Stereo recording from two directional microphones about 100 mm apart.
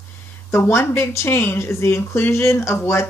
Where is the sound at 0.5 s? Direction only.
25° left (ahead or behind).